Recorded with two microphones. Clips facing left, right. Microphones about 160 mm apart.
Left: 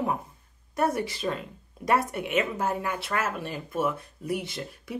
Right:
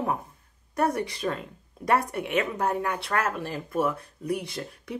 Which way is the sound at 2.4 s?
25° left (ahead or behind).